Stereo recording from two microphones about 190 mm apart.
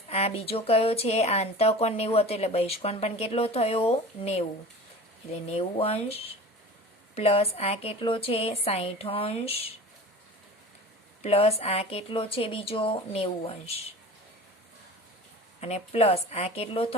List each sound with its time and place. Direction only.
0.1 s speech: 30° left (ahead or behind)
11.2 s speech: 30° left (ahead or behind)
15.6 s speech: 30° left (ahead or behind)